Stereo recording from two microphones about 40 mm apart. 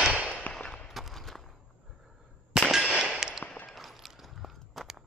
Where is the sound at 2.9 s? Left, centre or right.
Centre.